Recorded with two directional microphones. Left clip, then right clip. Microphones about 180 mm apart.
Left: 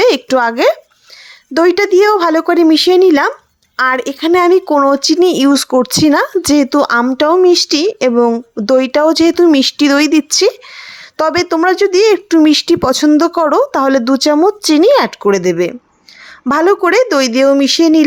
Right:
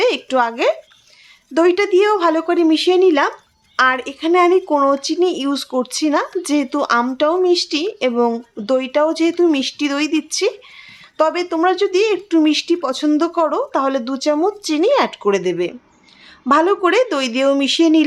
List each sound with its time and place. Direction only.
0.0 s speech: 40° left (ahead or behind)